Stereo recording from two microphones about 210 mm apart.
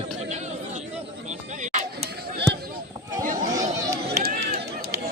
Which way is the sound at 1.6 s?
35° right (ahead or behind).